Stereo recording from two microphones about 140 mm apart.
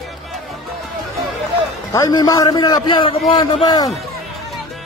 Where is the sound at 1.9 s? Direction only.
25° left (ahead or behind).